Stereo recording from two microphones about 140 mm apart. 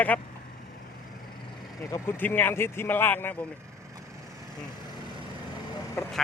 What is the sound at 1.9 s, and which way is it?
Speech, 15° left (ahead or behind).